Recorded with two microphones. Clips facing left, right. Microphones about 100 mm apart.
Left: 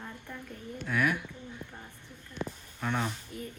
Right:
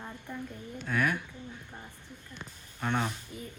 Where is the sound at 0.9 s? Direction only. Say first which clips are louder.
Even; 5° left (ahead or behind).